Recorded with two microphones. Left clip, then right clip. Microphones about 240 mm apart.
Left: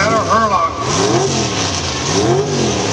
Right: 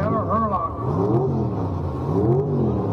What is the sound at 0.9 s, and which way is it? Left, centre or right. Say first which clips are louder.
Vehicle: left 6 dB; left.